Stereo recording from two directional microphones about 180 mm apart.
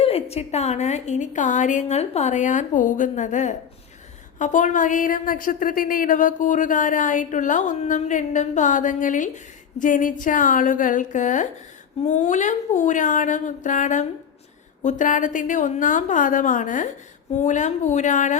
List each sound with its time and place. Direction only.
0.0 s a woman's voice: 35° left (ahead or behind)